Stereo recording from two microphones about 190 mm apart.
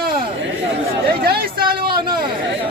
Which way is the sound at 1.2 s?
50° right (ahead or behind).